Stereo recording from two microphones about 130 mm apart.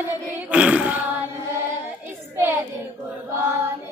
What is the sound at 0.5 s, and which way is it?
Child singing, 10° right (ahead or behind).